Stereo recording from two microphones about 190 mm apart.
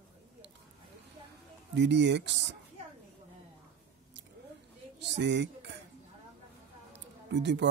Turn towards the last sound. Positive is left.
turn(degrees=-65)  # may be behind; listen again after turning